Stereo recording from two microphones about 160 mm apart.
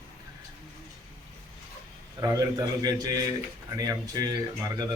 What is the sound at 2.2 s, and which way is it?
A man's voice, 20° right (ahead or behind).